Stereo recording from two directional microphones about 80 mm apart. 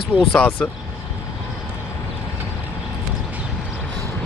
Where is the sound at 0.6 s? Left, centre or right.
Centre.